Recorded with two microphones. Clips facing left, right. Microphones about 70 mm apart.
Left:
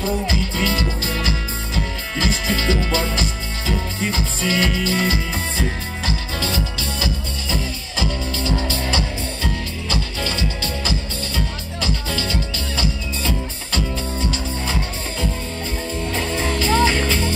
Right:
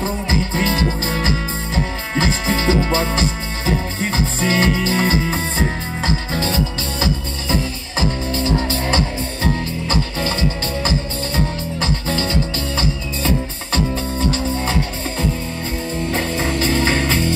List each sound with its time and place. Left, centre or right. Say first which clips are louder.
0.0 s music: right 1 dB; right